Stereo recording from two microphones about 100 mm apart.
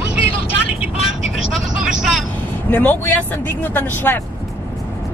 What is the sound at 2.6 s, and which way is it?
Speech, 15° left (ahead or behind).